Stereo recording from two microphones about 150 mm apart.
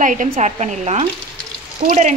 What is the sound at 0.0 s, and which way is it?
A woman's voice, 60° right (ahead or behind).